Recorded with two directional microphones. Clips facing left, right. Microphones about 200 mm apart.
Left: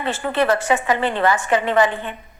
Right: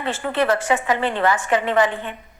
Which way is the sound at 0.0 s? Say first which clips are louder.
Left 1 dB; 35° left (ahead or behind).